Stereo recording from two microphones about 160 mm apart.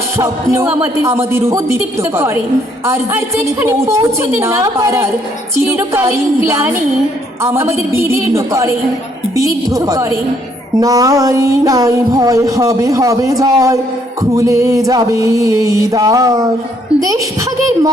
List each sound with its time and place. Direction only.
0.2 s speech: 15° right (ahead or behind)
9.3 s music: 20° right (ahead or behind)